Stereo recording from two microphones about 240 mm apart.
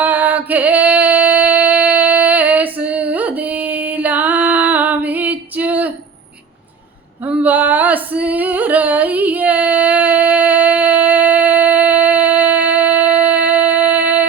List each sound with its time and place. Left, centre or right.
0.0 s music: centre
7.3 s female singing: centre